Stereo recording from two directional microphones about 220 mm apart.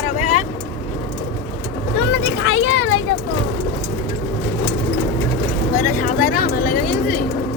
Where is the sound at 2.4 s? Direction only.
60° left (ahead or behind).